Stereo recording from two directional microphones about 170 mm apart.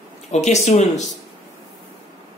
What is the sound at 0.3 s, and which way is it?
Speech, 40° left (ahead or behind).